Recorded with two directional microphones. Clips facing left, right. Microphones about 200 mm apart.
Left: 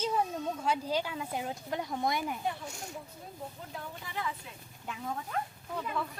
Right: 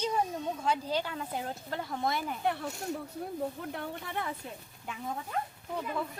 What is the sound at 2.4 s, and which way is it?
Speech, 65° right (ahead or behind).